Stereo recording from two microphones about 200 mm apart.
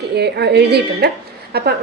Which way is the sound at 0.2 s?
55° right (ahead or behind).